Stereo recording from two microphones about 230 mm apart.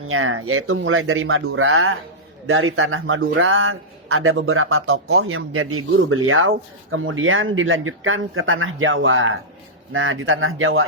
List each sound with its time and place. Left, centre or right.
0.1 s speech: right